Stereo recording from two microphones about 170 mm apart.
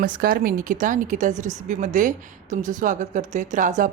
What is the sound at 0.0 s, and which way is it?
Speech, 55° right (ahead or behind).